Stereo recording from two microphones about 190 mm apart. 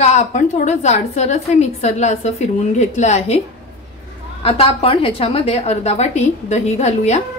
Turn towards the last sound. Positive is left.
turn(degrees=35)  # may be behind; listen again after turning